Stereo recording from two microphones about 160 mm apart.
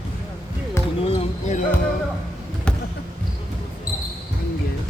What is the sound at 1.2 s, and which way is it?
Basketball bounce, 50° left (ahead or behind).